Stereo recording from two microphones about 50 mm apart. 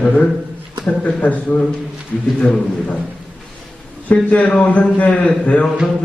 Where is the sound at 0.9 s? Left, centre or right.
Left.